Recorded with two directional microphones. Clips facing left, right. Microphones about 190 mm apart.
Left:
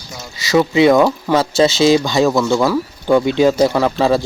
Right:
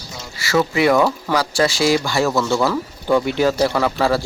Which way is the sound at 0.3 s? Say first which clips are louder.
Left 5 dB; 20° left (ahead or behind).